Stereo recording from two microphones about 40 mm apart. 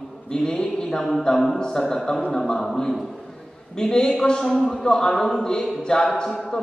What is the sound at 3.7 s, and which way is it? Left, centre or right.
A man's voice, centre.